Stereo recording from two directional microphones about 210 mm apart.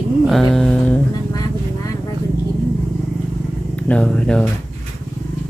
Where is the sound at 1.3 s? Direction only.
20° left (ahead or behind).